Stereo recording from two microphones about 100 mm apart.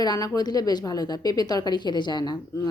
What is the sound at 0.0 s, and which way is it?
A woman's voice, 40° left (ahead or behind).